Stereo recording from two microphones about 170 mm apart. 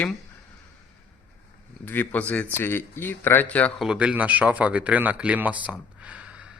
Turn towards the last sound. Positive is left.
turn(degrees=-5)  # may be behind; listen again after turning